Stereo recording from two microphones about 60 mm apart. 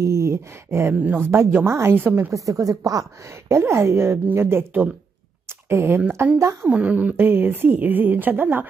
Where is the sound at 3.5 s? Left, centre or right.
Right.